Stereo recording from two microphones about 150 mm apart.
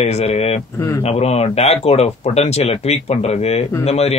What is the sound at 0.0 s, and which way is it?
Speech, 45° left (ahead or behind).